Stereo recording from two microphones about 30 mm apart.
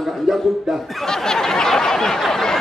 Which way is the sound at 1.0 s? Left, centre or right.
Centre.